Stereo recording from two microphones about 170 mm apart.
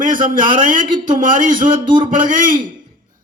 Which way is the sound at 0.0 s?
50° right (ahead or behind).